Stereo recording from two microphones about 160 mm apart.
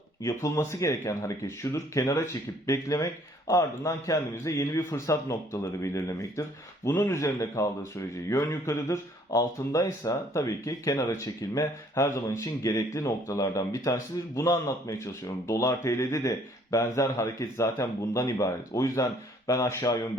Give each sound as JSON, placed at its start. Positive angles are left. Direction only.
{"t": 0.2, "sound": "speech", "side_deg": 20}